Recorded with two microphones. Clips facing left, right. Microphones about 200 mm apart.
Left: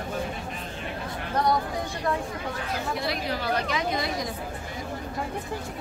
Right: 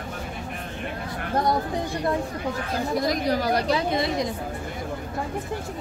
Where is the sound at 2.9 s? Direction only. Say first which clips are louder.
Right 6 dB; 40° right (ahead or behind); by 4.3 s 25° right (ahead or behind).